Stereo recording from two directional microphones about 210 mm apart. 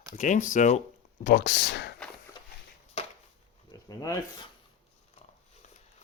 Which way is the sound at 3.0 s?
30° left (ahead or behind).